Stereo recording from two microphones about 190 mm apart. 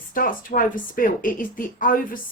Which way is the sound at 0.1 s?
45° left (ahead or behind).